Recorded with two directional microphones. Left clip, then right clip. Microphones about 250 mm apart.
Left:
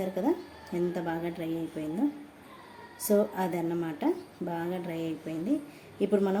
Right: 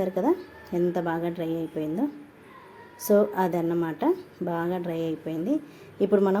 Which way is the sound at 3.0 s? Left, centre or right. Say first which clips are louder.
Right 5 dB; centre.